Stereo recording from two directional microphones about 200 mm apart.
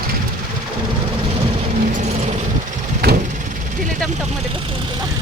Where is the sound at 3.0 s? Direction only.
50° right (ahead or behind).